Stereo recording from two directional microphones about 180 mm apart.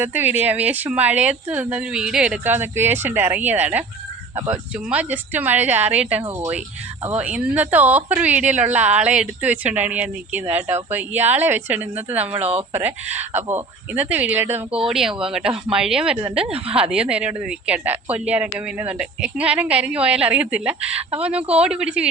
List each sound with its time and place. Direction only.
0.0 s a woman's voice: 10° right (ahead or behind)
12.2 s speech: 35° right (ahead or behind)
12.7 s a woman's voice: 10° right (ahead or behind)